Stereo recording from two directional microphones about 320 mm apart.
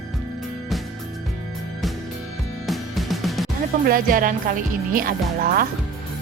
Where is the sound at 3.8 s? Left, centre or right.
Right.